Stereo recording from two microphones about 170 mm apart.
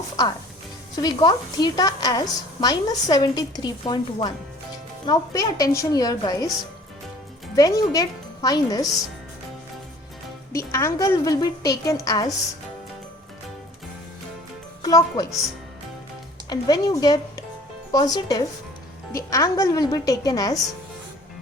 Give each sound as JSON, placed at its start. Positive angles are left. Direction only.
{"t": 0.9, "sound": "a woman's voice", "side_deg": 25}
{"t": 7.5, "sound": "speech", "side_deg": 20}
{"t": 10.7, "sound": "a woman's voice", "side_deg": 15}
{"t": 14.8, "sound": "speech", "side_deg": 20}
{"t": 16.5, "sound": "a woman's voice", "side_deg": 25}